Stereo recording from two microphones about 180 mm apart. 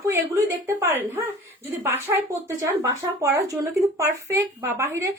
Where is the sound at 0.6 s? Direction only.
15° right (ahead or behind).